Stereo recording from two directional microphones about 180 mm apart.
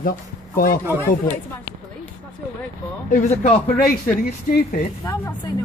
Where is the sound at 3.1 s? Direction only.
45° left (ahead or behind).